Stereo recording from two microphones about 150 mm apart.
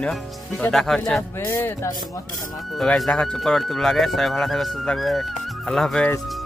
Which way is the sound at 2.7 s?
Centre (ahead or behind).